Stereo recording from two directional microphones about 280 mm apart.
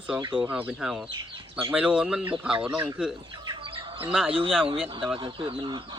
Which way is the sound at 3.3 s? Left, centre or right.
Centre.